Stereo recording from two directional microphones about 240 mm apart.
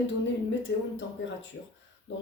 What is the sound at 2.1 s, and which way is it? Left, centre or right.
Speech, left.